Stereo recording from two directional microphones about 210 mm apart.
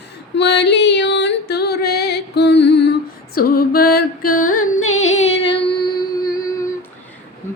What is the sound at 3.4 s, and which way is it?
Music, 45° left (ahead or behind).